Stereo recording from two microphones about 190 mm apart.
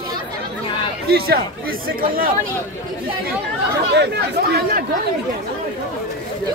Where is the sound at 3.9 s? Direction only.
60° right (ahead or behind).